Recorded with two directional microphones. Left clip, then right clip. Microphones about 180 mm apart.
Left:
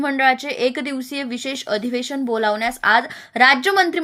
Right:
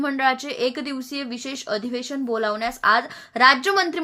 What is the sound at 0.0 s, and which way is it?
A woman's voice, 15° left (ahead or behind).